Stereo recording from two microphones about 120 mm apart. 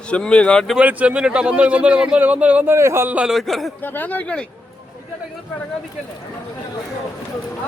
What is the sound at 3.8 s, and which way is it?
Speech, 15° left (ahead or behind).